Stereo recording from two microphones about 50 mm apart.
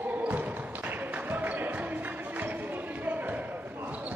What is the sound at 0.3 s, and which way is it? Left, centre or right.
Music, right.